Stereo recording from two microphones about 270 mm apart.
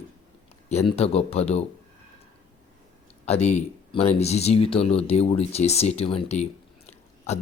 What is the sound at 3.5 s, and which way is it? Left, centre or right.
Speech, left.